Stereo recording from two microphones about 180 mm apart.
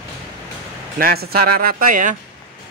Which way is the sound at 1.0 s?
55° right (ahead or behind).